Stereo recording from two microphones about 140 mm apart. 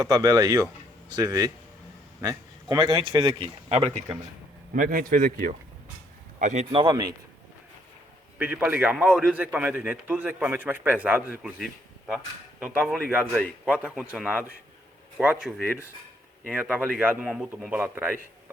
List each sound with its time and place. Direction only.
0.0 s a man's voice: 25° right (ahead or behind); by 4.2 s 45° right (ahead or behind)
4.7 s a man's voice: 75° right (ahead or behind)
6.4 s a man's voice: 55° right (ahead or behind)
6.7 s speech: 35° right (ahead or behind)
8.4 s a man's voice: 10° right (ahead or behind)